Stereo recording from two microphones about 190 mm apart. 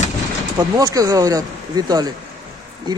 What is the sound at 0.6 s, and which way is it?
Speech, 20° right (ahead or behind).